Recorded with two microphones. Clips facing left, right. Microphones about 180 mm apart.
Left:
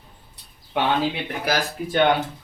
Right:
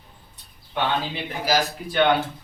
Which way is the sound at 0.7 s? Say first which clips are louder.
Left 3 dB; 70° left (ahead or behind).